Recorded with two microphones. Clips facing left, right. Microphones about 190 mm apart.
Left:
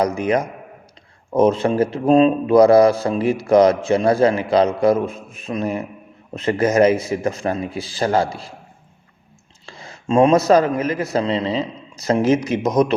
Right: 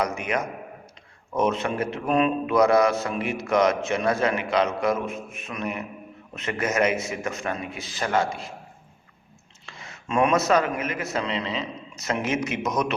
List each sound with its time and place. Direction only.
0.0 s speech: 35° left (ahead or behind)
9.6 s a man's voice: 35° left (ahead or behind)